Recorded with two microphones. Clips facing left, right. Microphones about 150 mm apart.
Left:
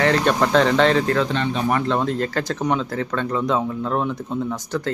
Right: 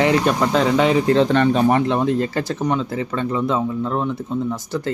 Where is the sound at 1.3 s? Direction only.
50° right (ahead or behind).